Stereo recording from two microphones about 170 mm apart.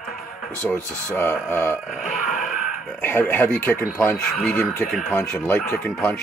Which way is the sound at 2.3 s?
50° left (ahead or behind).